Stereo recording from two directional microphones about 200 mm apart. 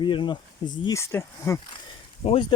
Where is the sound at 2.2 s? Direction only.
35° left (ahead or behind).